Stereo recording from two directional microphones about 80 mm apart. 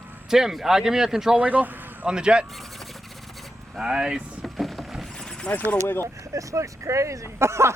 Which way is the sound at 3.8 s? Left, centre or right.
Centre.